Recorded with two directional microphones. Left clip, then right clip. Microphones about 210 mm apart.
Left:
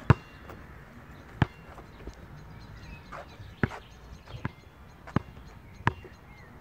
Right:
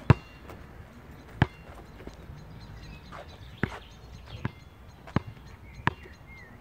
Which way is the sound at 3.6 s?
30° right (ahead or behind).